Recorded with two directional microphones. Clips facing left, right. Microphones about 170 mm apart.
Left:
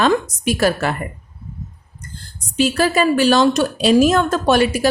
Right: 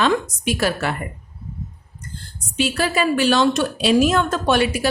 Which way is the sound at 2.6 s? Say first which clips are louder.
Left 4 dB; 40° left (ahead or behind).